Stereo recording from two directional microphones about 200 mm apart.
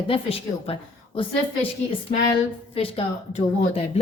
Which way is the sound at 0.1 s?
30° left (ahead or behind).